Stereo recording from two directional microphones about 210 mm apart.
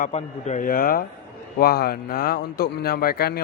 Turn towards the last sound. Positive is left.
turn(degrees=45)  # may be behind; listen again after turning